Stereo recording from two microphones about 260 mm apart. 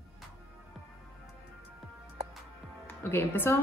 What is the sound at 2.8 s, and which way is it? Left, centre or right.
Music, centre.